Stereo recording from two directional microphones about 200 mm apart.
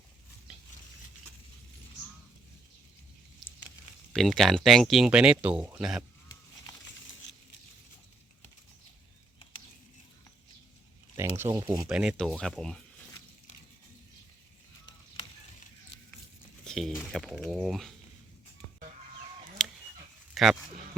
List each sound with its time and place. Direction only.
4.1 s speech: centre (ahead or behind)
11.2 s speech: 10° right (ahead or behind)
11.9 s speech: 5° right (ahead or behind)
16.6 s a sound: centre (ahead or behind)
17.1 s speech: centre (ahead or behind)
19.6 s dog: centre (ahead or behind)
20.3 s a sound: centre (ahead or behind)